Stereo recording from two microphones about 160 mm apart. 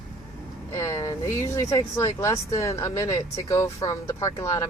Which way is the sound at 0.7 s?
20° left (ahead or behind).